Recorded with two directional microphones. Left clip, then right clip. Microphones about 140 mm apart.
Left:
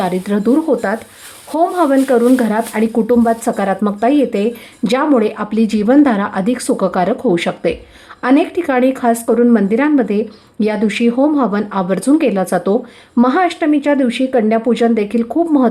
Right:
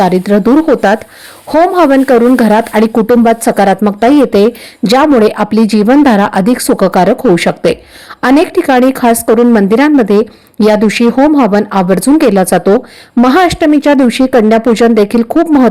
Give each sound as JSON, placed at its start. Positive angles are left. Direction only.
{"t": 0.0, "sound": "speech", "side_deg": -40}